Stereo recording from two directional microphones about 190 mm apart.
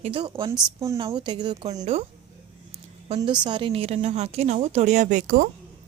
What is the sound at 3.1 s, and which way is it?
Speech, 25° right (ahead or behind).